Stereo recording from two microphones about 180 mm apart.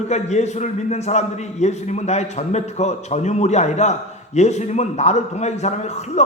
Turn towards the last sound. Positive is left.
turn(degrees=40)  # may be behind; listen again after turning